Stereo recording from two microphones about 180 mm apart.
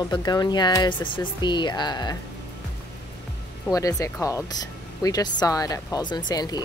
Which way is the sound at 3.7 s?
20° left (ahead or behind).